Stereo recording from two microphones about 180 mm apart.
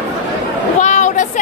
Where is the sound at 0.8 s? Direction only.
45° left (ahead or behind).